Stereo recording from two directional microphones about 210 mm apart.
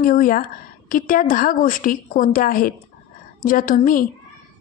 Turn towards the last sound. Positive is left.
turn(degrees=40)  # may be behind; listen again after turning